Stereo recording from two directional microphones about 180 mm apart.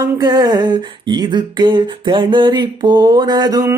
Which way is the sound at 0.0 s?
20° right (ahead or behind).